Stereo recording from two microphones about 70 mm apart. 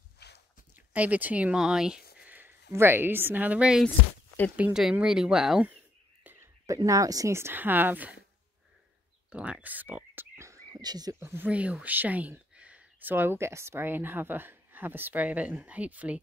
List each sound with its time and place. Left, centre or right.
0.7 s speech: right
1.6 s speech: centre
2.2 s a sound: right
2.7 s a woman's voice: right
5.0 s speech: centre
6.2 s whispering: right
6.6 s speech: right
7.3 s speech: right
9.3 s speech: centre
10.3 s whispering: right
10.7 s speech: right
11.1 s a woman's voice: right
11.4 s speech: centre
13.4 s speech: right